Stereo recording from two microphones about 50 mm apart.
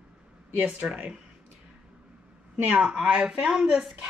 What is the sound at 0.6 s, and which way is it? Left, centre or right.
Speech, right.